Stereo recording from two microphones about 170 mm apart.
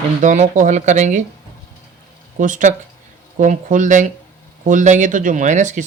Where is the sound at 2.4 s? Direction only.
50° right (ahead or behind).